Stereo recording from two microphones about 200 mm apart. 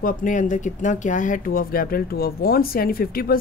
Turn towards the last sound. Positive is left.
turn(degrees=50)  # may be behind; listen again after turning